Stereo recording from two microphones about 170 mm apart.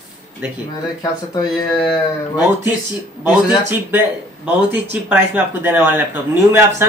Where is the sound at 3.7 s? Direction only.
10° right (ahead or behind).